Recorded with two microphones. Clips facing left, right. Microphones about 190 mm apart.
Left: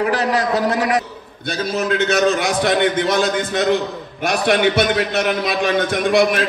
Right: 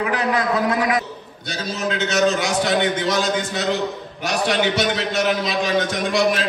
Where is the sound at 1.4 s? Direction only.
60° left (ahead or behind).